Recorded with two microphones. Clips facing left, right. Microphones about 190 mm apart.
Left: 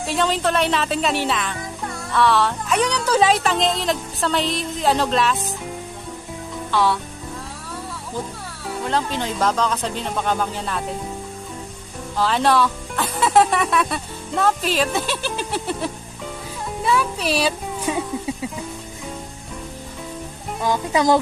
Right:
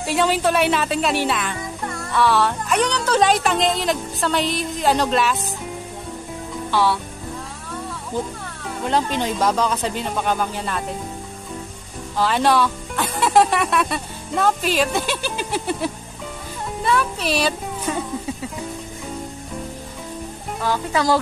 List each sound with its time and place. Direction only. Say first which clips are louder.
0.0 s speech: right 2 dB; 5° right (ahead or behind)
6.7 s speech: even; 5° right (ahead or behind)
8.9 s speech: right 3 dB; 15° right (ahead or behind)
12.2 s speech: even; centre (ahead or behind)
16.8 s music: even; 5° left (ahead or behind)
20.6 s speech: left 2 dB; 15° left (ahead or behind)